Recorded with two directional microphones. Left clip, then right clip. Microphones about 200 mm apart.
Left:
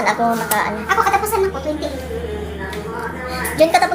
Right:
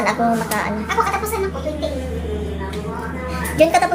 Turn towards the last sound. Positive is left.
turn(degrees=0)  # may be behind; listen again after turning